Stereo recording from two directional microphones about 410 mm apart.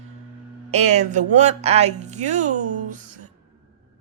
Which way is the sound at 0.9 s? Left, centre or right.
Centre.